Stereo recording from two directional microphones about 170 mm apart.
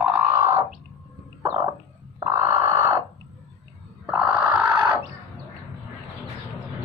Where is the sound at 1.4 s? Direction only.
20° right (ahead or behind).